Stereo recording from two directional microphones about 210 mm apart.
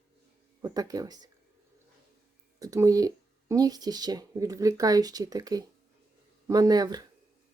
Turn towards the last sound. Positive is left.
turn(degrees=-20)  # may be behind; listen again after turning